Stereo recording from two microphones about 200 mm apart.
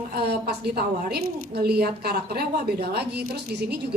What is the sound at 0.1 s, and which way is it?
A woman's voice, 55° right (ahead or behind).